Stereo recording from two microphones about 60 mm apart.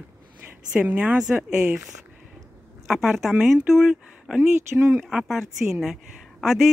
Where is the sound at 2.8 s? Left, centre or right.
Centre.